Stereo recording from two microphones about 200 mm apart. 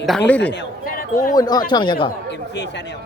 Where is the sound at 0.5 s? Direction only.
45° left (ahead or behind).